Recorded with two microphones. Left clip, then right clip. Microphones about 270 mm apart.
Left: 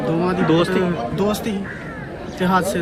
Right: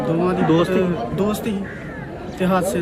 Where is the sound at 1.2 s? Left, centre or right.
Centre.